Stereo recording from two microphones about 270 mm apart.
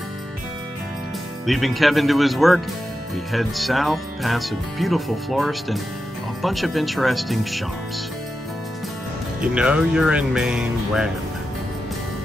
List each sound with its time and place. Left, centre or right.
1.4 s speech: centre
9.4 s speech: centre